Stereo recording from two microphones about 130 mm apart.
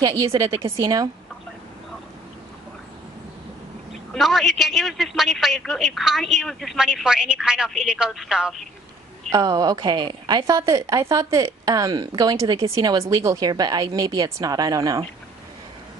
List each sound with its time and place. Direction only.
0.0 s a woman's voice: 25° right (ahead or behind)
4.1 s a man's voice: centre (ahead or behind)
9.3 s a woman's voice: 30° right (ahead or behind)